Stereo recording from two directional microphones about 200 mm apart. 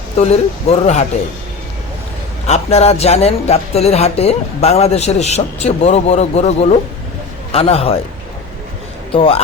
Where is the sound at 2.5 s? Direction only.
30° left (ahead or behind).